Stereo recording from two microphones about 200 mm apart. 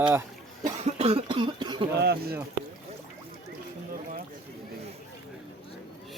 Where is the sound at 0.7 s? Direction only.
30° right (ahead or behind).